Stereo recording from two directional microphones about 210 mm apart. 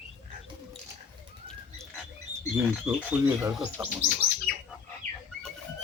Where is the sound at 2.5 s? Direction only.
10° right (ahead or behind).